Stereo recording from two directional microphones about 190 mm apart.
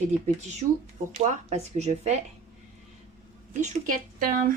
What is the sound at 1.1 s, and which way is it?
Speech, 35° right (ahead or behind).